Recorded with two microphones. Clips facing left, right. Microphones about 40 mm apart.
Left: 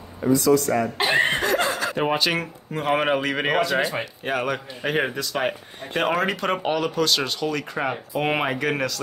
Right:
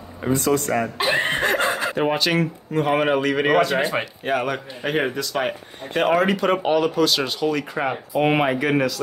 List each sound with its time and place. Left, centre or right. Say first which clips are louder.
0.2 s speech: left 2 dB; right
1.4 s chuckle: right 2 dB; right
2.0 s a man's voice: right 2 dB; centre
3.6 s speech: right 1 dB; centre
4.2 s a man's voice: even; centre